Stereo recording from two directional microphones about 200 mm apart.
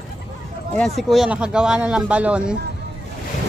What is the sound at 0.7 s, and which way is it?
A man's voice, centre (ahead or behind).